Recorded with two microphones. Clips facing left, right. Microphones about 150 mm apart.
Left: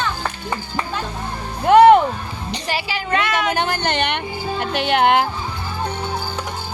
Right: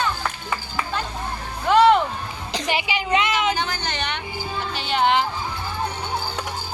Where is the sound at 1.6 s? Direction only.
55° left (ahead or behind).